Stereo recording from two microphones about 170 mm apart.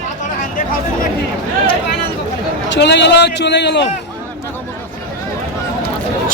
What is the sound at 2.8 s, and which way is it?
A man's voice, 90° left.